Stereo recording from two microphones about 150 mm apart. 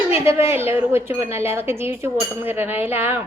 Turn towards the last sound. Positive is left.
turn(degrees=-15)  # may be behind; listen again after turning